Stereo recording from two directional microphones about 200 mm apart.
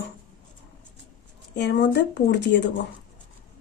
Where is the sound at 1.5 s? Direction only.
60° left (ahead or behind).